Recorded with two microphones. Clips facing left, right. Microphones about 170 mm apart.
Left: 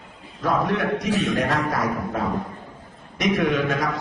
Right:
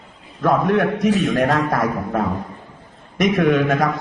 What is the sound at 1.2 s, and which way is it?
A man's voice, 65° right (ahead or behind).